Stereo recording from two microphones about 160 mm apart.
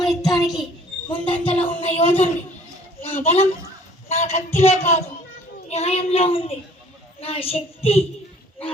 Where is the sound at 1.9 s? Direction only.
40° left (ahead or behind).